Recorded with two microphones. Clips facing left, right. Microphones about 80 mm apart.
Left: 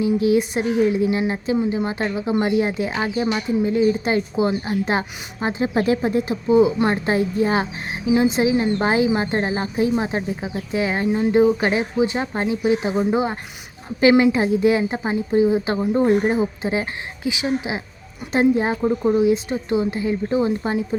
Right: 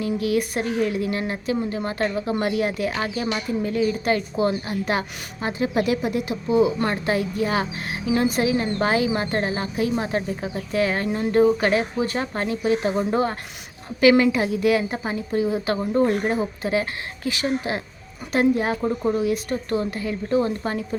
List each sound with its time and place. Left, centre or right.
0.2 s a woman's voice: left
8.0 s a woman's voice: centre
14.0 s a woman's voice: left
18.3 s a woman's voice: left